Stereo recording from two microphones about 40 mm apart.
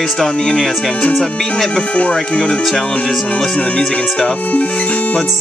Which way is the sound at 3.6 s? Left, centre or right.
Left.